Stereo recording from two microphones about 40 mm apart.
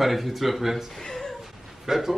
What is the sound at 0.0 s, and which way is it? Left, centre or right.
Speech, centre.